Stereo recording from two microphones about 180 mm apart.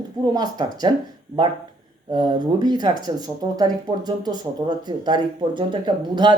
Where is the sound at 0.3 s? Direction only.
20° right (ahead or behind).